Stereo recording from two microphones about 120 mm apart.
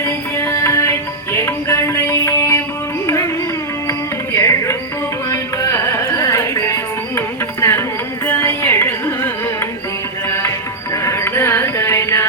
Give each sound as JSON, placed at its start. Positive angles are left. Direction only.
{"t": 0.0, "sound": "music", "side_deg": 20}
{"t": 3.8, "sound": "music", "side_deg": 25}
{"t": 5.3, "sound": "carnatic music", "side_deg": 25}
{"t": 7.2, "sound": "music", "side_deg": 20}